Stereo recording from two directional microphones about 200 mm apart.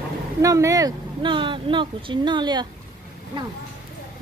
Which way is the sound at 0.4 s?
15° right (ahead or behind).